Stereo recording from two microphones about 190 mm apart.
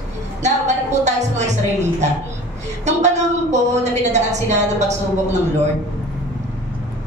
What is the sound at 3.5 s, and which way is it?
A woman's voice, 35° right (ahead or behind).